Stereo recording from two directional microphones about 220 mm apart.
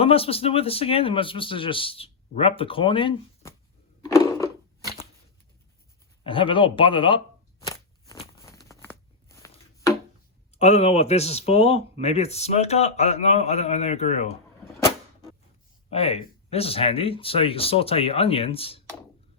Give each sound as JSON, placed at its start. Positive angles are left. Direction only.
{"t": 0.0, "sound": "speech", "side_deg": 25}
{"t": 4.0, "sound": "a sound", "side_deg": 15}
{"t": 6.2, "sound": "speech", "side_deg": 25}
{"t": 7.6, "sound": "crunch", "side_deg": 15}
{"t": 8.4, "sound": "a sound", "side_deg": 15}
{"t": 10.6, "sound": "speech", "side_deg": 30}
{"t": 15.9, "sound": "speech", "side_deg": 30}